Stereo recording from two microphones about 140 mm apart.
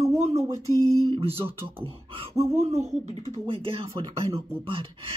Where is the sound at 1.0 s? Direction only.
45° right (ahead or behind).